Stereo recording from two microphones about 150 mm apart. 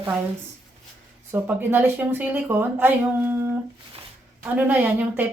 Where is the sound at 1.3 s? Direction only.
15° right (ahead or behind).